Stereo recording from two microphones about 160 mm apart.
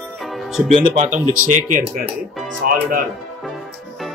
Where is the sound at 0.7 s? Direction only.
35° right (ahead or behind).